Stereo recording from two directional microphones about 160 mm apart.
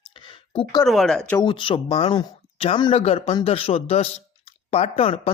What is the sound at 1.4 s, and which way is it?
Speech, 30° left (ahead or behind).